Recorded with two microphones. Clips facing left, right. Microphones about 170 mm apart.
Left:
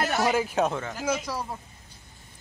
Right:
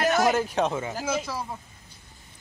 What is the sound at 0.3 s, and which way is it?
Speech, 5° left (ahead or behind).